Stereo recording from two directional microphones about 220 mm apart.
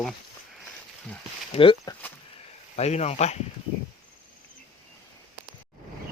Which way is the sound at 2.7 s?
30° left (ahead or behind).